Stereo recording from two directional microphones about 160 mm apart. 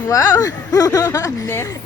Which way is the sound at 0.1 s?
25° left (ahead or behind).